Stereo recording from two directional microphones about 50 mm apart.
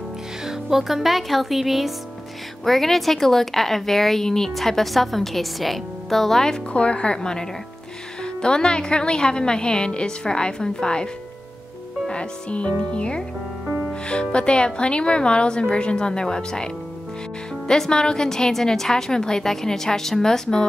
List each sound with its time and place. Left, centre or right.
0.5 s a woman's voice: centre
6.7 s a woman's voice: left
12.1 s a woman's voice: left
13.7 s music: centre
14.3 s a woman's voice: centre